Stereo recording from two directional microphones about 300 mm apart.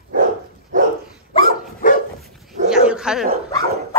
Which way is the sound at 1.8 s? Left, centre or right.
Left.